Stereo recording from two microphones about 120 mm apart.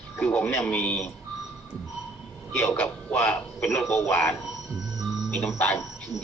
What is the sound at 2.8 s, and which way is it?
Speech, 20° left (ahead or behind).